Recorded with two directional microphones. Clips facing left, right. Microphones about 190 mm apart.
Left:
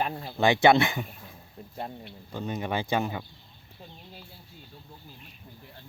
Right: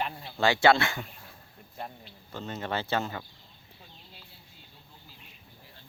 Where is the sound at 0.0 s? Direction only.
45° left (ahead or behind).